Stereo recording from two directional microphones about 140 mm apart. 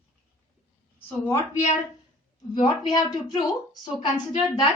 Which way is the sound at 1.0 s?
15° left (ahead or behind).